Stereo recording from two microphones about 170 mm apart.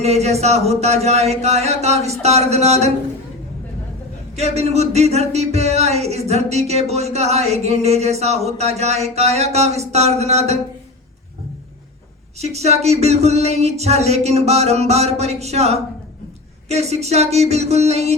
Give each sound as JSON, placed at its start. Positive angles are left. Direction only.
{"t": 0.0, "sound": "speech", "side_deg": -40}
{"t": 4.4, "sound": "speech", "side_deg": -40}
{"t": 12.4, "sound": "speech", "side_deg": -40}